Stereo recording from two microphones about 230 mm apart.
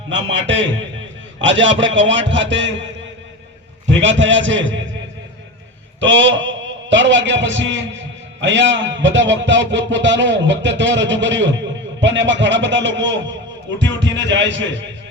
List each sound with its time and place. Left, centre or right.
0.1 s a man's voice: right
3.8 s a man's voice: right
6.0 s a man's voice: right